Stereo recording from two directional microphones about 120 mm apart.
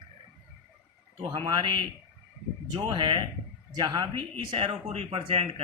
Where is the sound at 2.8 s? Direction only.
40° right (ahead or behind).